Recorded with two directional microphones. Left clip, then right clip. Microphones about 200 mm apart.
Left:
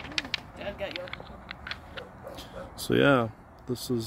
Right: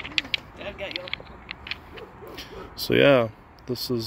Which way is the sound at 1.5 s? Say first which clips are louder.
Right 4 dB; 50° left (ahead or behind).